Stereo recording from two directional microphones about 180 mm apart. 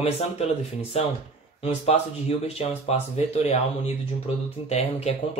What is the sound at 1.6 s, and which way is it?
Speech, 35° left (ahead or behind).